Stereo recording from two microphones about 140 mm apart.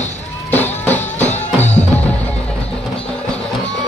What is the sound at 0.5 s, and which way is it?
Music, 15° left (ahead or behind).